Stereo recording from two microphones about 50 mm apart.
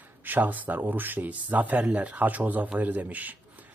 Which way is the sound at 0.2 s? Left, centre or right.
Right.